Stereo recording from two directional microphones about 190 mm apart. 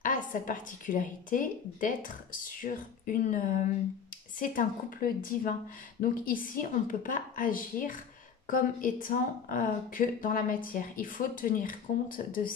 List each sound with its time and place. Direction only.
0.0 s speech: 45° left (ahead or behind)